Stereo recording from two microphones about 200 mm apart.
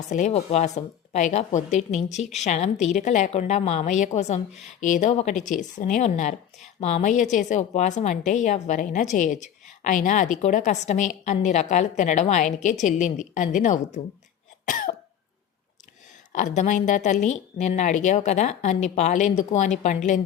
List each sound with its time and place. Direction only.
0.1 s a woman's voice: 35° left (ahead or behind)
14.6 s cough: 40° left (ahead or behind)
16.3 s a woman's voice: 40° left (ahead or behind)